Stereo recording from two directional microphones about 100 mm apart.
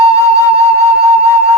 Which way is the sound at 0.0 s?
30° left (ahead or behind).